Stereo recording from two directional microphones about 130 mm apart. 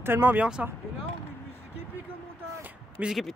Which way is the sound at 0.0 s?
15° right (ahead or behind).